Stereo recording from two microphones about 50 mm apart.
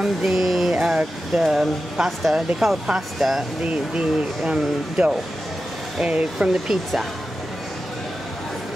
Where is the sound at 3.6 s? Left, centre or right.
Right.